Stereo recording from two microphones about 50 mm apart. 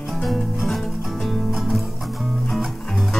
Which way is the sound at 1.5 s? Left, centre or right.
Centre.